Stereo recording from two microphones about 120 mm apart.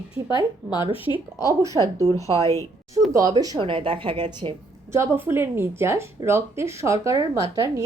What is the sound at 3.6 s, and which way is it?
Speech, 45° right (ahead or behind).